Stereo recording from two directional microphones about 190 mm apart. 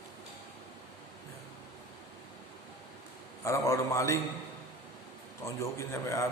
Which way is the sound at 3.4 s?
15° left (ahead or behind).